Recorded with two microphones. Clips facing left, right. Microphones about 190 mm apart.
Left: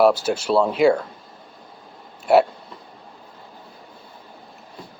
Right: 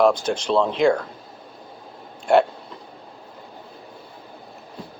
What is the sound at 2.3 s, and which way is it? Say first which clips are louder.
Speech: left 1 dB; 5° left (ahead or behind).